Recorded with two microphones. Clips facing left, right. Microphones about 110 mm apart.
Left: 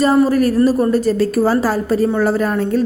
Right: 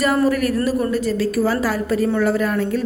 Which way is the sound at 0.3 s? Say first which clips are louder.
Left 5 dB; 35° left (ahead or behind).